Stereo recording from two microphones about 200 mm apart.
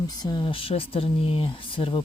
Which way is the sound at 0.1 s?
20° left (ahead or behind).